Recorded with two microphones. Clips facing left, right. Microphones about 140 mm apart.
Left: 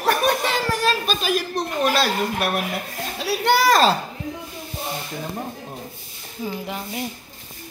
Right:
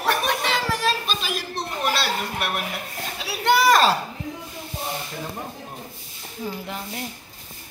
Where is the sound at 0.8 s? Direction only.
45° left (ahead or behind).